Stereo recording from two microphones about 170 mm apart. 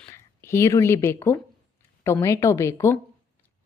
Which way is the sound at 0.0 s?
15° left (ahead or behind).